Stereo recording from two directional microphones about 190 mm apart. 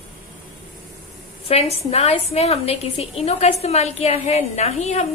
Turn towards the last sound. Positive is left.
turn(degrees=35)  # may be behind; listen again after turning